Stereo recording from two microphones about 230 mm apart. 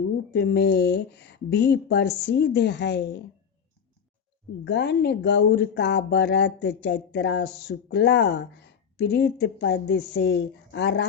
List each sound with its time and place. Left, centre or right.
0.3 s speech: left
4.6 s speech: left